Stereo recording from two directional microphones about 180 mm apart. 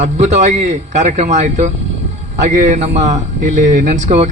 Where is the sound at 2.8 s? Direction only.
40° right (ahead or behind).